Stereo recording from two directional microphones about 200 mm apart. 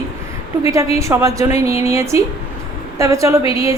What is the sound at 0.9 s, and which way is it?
Speech, 15° right (ahead or behind).